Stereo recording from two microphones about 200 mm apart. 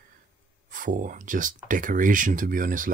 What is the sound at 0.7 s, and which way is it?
Speech, 40° right (ahead or behind).